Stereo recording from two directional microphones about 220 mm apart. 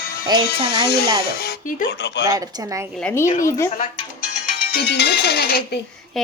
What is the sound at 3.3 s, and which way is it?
Speech, 35° left (ahead or behind).